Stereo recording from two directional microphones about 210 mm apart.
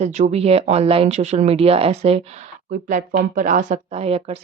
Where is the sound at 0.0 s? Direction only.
30° right (ahead or behind).